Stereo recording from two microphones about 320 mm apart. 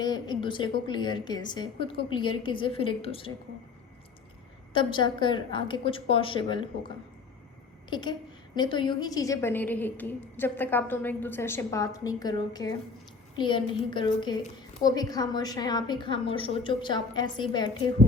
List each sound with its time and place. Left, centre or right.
0.0 s a woman's voice: centre
4.7 s a woman's voice: centre